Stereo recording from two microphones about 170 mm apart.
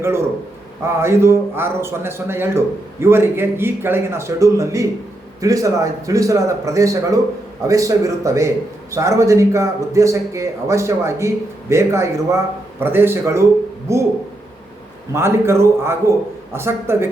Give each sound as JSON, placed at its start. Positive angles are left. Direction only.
{"t": 0.0, "sound": "a man's voice", "side_deg": -15}
{"t": 15.1, "sound": "a man's voice", "side_deg": -15}